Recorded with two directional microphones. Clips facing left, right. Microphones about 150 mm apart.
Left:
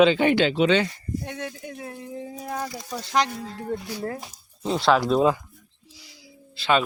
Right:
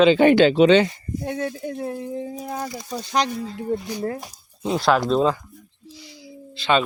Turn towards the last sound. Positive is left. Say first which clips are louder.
# right 1 dB
turn(degrees=5)  # may be behind; listen again after turning